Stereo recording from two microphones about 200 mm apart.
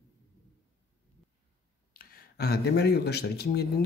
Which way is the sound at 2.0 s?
55° left (ahead or behind).